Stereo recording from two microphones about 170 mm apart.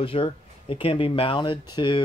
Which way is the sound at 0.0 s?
30° left (ahead or behind).